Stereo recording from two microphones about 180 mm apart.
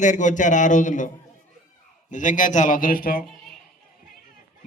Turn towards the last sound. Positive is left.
turn(degrees=55)  # may be behind; listen again after turning